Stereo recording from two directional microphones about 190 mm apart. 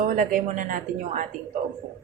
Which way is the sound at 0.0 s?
45° right (ahead or behind).